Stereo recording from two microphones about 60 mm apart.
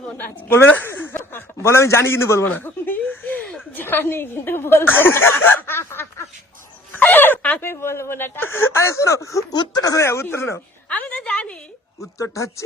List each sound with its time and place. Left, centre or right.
0.2 s speech: left
2.6 s a sound: left
3.8 s speech: left
10.0 s speech: left
10.8 s a sound: left
11.9 s speech: left